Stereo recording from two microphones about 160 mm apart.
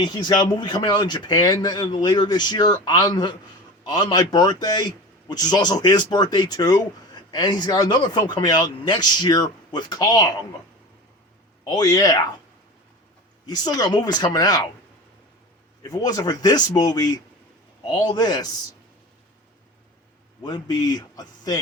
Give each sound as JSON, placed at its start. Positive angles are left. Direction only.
{"t": 0.0, "sound": "speech", "side_deg": 25}
{"t": 11.6, "sound": "speech", "side_deg": 25}
{"t": 13.4, "sound": "speech", "side_deg": 25}
{"t": 15.8, "sound": "speech", "side_deg": 25}
{"t": 20.4, "sound": "speech", "side_deg": 25}